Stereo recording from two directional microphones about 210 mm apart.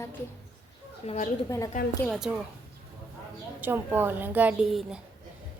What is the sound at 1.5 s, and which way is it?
Speech, 15° left (ahead or behind).